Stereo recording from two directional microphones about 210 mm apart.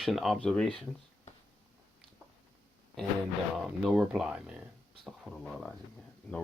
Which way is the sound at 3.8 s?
5° right (ahead or behind).